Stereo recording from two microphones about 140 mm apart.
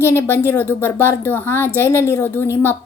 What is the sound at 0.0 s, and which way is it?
A woman's voice, 15° left (ahead or behind).